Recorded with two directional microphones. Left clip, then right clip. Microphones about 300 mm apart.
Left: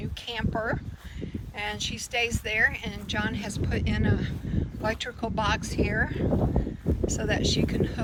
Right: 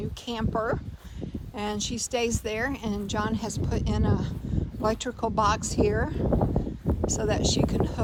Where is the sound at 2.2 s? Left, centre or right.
Right.